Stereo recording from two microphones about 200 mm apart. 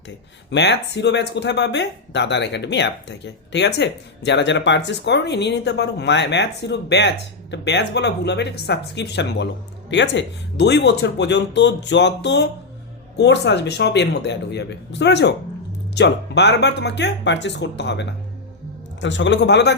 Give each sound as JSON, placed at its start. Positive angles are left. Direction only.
{"t": 0.5, "sound": "speech", "side_deg": 60}